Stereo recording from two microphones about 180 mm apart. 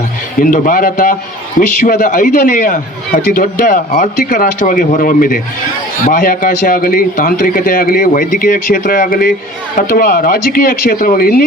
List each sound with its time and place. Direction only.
0.3 s a man's voice: 50° left (ahead or behind)